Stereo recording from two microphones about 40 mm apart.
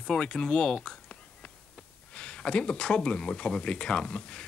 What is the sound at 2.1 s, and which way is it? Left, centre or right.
Speech, left.